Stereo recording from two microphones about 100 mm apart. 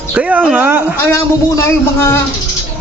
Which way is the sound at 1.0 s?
25° left (ahead or behind).